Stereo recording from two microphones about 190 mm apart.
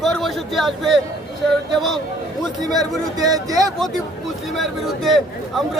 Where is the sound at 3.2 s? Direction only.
20° right (ahead or behind).